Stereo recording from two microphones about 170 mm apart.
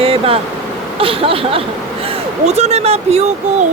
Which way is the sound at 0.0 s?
35° right (ahead or behind).